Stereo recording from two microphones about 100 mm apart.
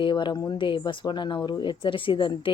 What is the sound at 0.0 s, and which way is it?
Speech, 50° left (ahead or behind).